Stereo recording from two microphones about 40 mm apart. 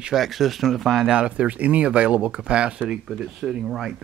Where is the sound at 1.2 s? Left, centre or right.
Right.